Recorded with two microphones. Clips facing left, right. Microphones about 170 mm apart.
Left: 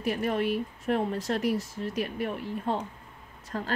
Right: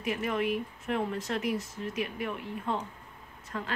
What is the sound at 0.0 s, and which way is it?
Speech, 35° left (ahead or behind).